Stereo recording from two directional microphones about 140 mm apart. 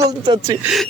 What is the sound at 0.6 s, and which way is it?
Speech, 5° right (ahead or behind).